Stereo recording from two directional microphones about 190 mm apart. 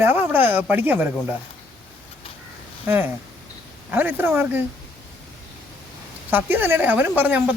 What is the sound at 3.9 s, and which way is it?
Speech, 10° right (ahead or behind).